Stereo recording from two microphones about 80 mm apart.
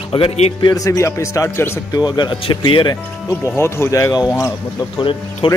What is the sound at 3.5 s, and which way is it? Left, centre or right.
Speech, left.